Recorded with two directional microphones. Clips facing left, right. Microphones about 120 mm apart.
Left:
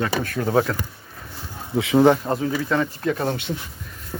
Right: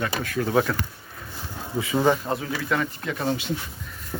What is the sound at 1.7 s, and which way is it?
Speech, 75° left (ahead or behind).